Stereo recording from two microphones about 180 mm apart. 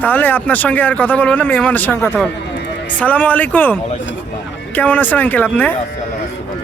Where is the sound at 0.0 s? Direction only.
10° left (ahead or behind).